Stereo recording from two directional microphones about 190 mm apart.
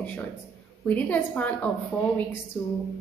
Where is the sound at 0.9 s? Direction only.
10° left (ahead or behind).